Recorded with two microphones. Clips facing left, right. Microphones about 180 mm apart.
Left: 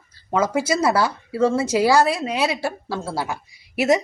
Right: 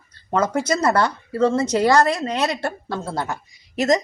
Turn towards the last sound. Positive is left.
turn(degrees=10)  # may be behind; listen again after turning